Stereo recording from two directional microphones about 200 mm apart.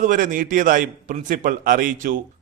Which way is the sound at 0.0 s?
40° right (ahead or behind).